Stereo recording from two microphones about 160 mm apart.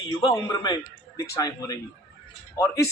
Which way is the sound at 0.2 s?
35° left (ahead or behind).